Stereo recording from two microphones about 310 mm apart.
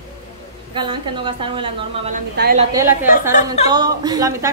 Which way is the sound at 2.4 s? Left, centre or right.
Right.